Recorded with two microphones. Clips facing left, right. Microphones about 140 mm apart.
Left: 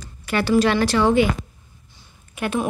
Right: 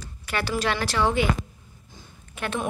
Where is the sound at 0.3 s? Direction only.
Centre (ahead or behind).